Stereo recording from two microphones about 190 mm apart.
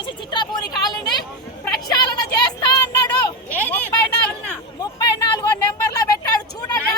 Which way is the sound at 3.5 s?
10° left (ahead or behind).